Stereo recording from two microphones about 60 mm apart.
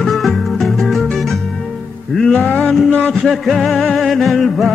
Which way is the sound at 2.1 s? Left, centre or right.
Centre.